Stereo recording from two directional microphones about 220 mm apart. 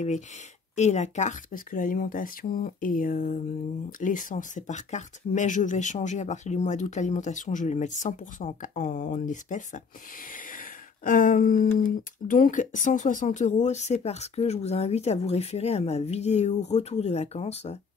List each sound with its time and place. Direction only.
0.7 s speech: 30° left (ahead or behind)
10.3 s a sound: 40° left (ahead or behind)
11.8 s speech: 40° left (ahead or behind)